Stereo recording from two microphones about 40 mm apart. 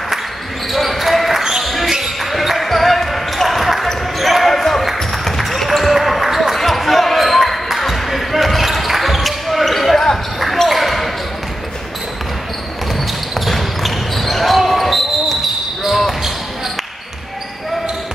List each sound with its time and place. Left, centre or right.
0.7 s basketball bounce: centre
13.5 s basketball bounce: centre